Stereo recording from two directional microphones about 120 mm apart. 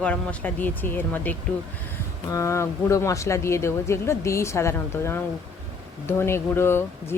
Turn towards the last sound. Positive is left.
turn(degrees=20)  # may be behind; listen again after turning